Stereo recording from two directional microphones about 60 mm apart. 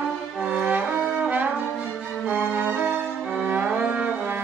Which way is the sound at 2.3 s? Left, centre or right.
Right.